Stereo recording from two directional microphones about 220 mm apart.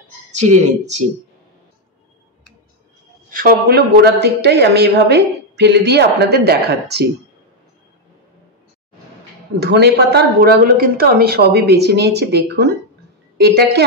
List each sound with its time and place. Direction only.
0.4 s speech: 30° right (ahead or behind)
3.3 s speech: 40° right (ahead or behind)
9.6 s speech: 50° right (ahead or behind)